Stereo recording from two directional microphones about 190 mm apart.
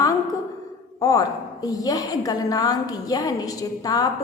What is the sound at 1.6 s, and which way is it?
A woman's voice, 20° left (ahead or behind).